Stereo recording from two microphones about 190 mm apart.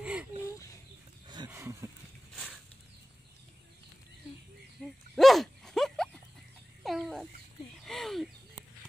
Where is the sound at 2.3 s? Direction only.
Centre (ahead or behind).